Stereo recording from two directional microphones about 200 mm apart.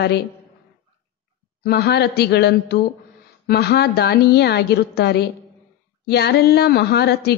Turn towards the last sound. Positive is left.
turn(degrees=55)  # may be behind; listen again after turning